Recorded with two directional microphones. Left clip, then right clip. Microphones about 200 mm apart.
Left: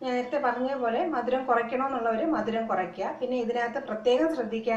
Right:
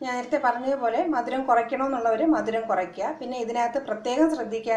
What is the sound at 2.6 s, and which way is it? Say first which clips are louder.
A woman's voice: right 3 dB; 45° right (ahead or behind).